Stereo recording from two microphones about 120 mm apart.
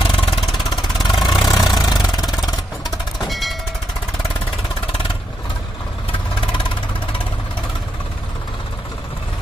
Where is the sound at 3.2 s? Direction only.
Centre (ahead or behind).